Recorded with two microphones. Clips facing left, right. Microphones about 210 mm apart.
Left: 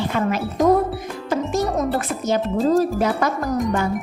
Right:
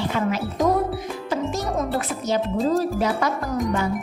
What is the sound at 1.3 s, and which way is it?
Music, 50° left (ahead or behind).